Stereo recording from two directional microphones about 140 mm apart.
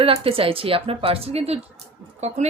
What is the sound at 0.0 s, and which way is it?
Speech, 40° right (ahead or behind).